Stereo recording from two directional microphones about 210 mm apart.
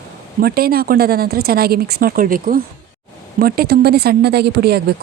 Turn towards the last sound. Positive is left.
turn(degrees=-50)  # may be behind; listen again after turning